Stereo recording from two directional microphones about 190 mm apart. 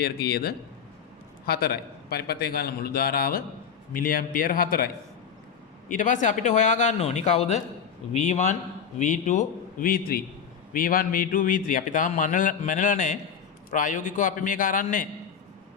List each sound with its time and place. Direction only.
0.0 s a man's voice: 55° left (ahead or behind)
5.9 s a man's voice: 40° left (ahead or behind)